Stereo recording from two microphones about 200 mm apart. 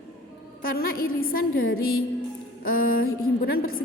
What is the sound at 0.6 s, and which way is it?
A woman's voice, 50° left (ahead or behind).